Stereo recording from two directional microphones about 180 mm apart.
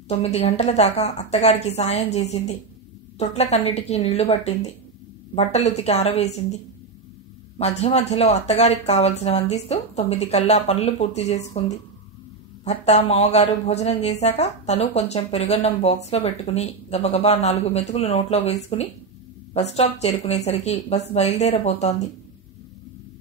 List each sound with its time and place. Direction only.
0.1 s speech: 35° left (ahead or behind)
12.6 s speech: 40° left (ahead or behind)